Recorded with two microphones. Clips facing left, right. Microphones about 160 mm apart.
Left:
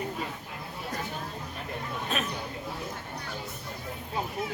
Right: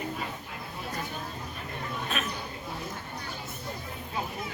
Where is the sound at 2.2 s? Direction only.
35° left (ahead or behind).